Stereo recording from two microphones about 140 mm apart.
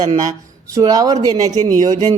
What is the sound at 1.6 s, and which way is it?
Speech, 60° right (ahead or behind).